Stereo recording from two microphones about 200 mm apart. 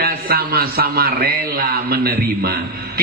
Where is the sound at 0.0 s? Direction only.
50° right (ahead or behind).